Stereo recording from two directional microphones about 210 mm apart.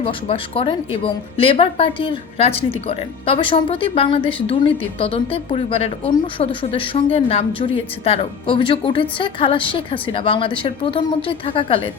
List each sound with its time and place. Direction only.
0.0 s a woman's voice: 25° left (ahead or behind)